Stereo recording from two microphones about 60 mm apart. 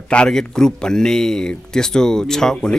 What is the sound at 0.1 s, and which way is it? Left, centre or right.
A man's voice, centre.